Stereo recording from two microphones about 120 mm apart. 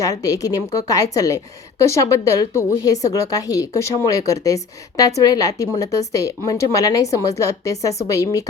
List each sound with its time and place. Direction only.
0.0 s a woman's voice: 30° left (ahead or behind)